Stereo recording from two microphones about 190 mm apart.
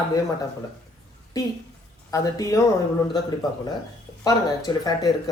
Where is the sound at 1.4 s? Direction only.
20° left (ahead or behind).